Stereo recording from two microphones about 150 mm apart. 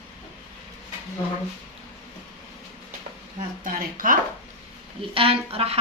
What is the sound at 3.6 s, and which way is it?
Speech, 65° right (ahead or behind).